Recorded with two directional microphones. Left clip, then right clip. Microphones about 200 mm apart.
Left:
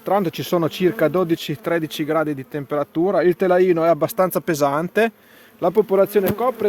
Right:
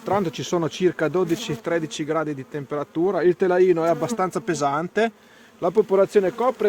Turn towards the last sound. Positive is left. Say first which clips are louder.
# left 1 dB
turn(degrees=30)  # may be behind; listen again after turning